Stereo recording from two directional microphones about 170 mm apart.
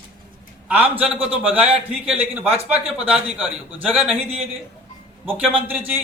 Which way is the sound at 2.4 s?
35° right (ahead or behind).